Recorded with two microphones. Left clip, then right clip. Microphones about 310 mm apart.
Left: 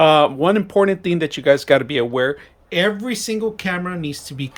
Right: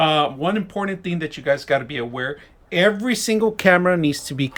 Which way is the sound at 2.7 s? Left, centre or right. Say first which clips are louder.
Right 1 dB; centre.